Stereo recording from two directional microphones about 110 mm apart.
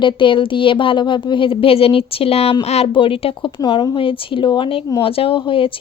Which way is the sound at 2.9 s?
55° left (ahead or behind).